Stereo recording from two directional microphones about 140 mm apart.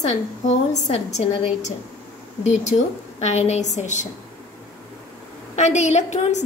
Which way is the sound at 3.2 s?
50° left (ahead or behind).